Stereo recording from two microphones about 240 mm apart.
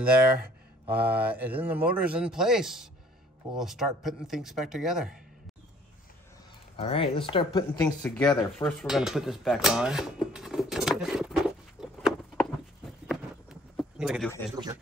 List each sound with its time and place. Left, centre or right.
0.8 s speech: centre
6.8 s speech: left
8.8 s a sound: centre
14.5 s speech: centre